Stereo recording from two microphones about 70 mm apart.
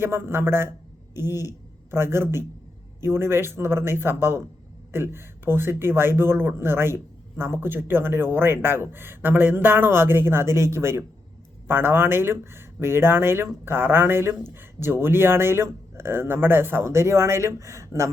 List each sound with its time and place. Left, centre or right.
0.0 s speech: right